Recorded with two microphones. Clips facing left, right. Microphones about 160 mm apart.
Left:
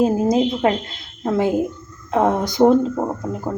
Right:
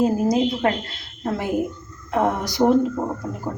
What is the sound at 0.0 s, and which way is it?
Speech, 20° left (ahead or behind).